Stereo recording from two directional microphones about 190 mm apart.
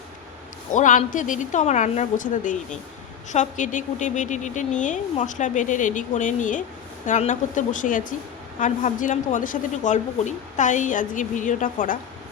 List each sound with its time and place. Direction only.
0.7 s a woman's voice: 40° left (ahead or behind)